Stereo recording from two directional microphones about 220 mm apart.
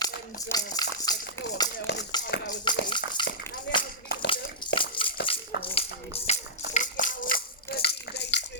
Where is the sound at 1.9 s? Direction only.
50° left (ahead or behind).